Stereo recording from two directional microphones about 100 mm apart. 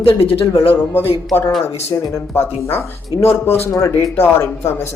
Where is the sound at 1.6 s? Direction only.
25° left (ahead or behind).